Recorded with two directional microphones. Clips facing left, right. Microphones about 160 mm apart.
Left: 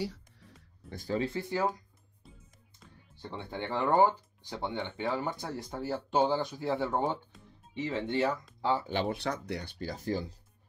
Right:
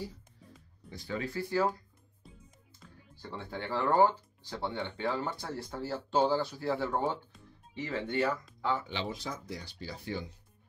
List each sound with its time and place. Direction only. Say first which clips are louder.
0.0 s music: left 5 dB; 80° left
0.8 s speech: left 5 dB; 50° left (ahead or behind)
1.1 s speech: left 1 dB; 25° left (ahead or behind)
3.2 s speech: left 2 dB; 20° left (ahead or behind)
8.8 s speech: left 6 dB; 55° left (ahead or behind)